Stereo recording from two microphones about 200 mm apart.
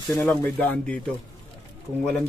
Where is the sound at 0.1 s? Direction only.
10° left (ahead or behind).